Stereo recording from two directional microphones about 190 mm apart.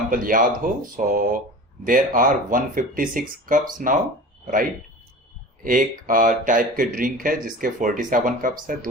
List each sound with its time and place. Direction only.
0.1 s speech: 45° right (ahead or behind)
5.6 s speech: 45° right (ahead or behind)